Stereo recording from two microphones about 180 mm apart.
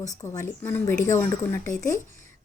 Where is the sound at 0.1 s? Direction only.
20° left (ahead or behind).